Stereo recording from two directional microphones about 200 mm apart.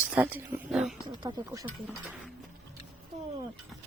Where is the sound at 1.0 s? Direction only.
20° right (ahead or behind).